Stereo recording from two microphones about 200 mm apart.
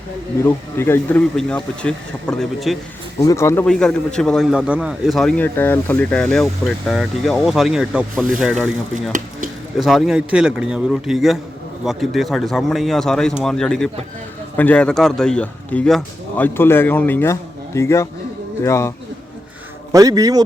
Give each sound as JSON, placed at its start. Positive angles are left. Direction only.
{"t": 0.4, "sound": "a man's voice", "side_deg": 10}
{"t": 3.2, "sound": "a man's voice", "side_deg": 15}
{"t": 9.7, "sound": "a man's voice", "side_deg": 0}
{"t": 19.9, "sound": "speech", "side_deg": -15}